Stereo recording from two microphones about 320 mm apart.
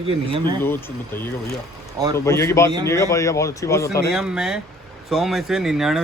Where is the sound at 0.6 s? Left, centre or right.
Centre.